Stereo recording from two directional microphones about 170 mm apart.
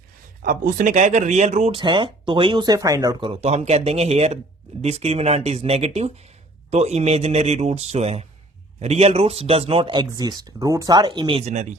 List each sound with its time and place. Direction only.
0.4 s speech: 50° right (ahead or behind)
1.8 s speech: 30° right (ahead or behind)